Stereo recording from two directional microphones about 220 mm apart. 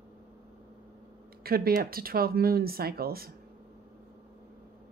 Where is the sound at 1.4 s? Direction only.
45° right (ahead or behind).